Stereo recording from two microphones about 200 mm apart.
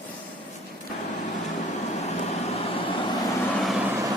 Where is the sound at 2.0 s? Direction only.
30° left (ahead or behind).